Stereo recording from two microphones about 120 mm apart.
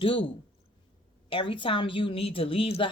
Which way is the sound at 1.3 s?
45° left (ahead or behind).